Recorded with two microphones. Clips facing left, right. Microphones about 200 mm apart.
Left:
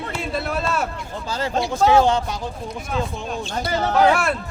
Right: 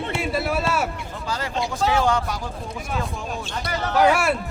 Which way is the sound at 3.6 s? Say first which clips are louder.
Left 4 dB; 25° left (ahead or behind).